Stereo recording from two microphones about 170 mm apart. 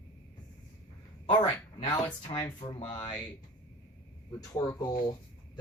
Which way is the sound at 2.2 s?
30° left (ahead or behind).